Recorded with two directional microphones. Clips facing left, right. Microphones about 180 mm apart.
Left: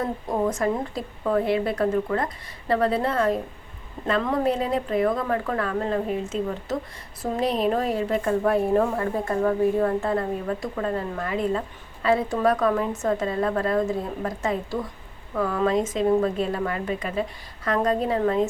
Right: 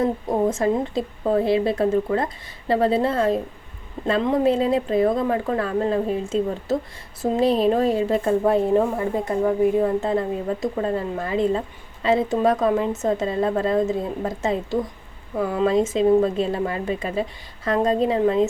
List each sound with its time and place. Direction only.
0.3 s a woman's voice: 25° right (ahead or behind)